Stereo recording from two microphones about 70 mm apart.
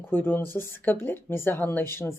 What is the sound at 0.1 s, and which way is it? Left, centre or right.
Speech, left.